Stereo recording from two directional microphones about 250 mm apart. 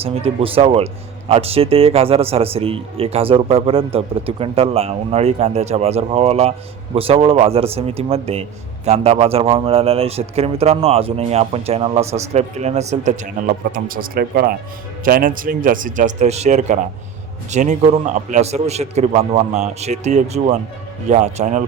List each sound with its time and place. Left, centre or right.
0.0 s a man's voice: right